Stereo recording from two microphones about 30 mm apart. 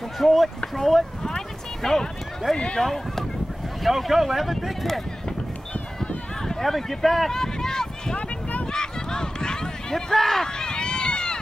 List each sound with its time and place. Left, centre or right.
0.2 s speech: centre
1.2 s a sound: centre
2.5 s speech: left
2.8 s speech: centre
3.8 s speech: centre
6.6 s speech: centre
7.2 s run: centre
10.1 s speech: centre
10.4 s run: left